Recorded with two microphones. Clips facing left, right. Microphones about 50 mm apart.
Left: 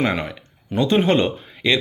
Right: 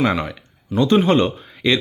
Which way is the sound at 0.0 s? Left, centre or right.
Centre.